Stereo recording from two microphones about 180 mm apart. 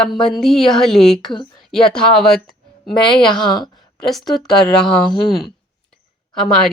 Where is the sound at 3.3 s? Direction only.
25° left (ahead or behind).